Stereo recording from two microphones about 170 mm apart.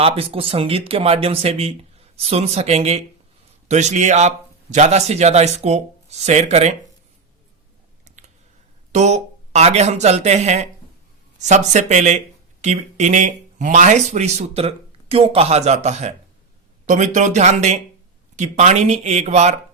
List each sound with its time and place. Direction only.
0.0 s a man's voice: 35° right (ahead or behind)
8.0 s a sound: 45° right (ahead or behind)
8.9 s a man's voice: 40° right (ahead or behind)